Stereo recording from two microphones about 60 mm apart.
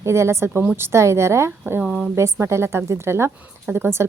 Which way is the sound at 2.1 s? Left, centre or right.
Right.